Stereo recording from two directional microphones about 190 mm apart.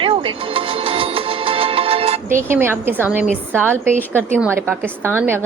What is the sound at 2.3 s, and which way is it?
A woman's voice, 10° right (ahead or behind).